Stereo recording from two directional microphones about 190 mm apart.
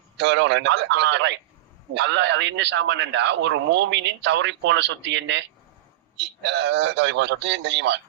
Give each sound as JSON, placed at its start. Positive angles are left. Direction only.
{"t": 0.2, "sound": "a man's voice", "side_deg": -70}